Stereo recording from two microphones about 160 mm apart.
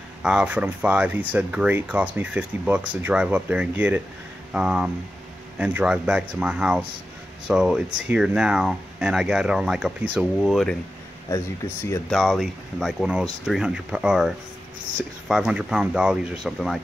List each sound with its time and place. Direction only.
0.2 s speech: 5° right (ahead or behind)
11.2 s speech: 20° left (ahead or behind)
12.1 s speech: centre (ahead or behind)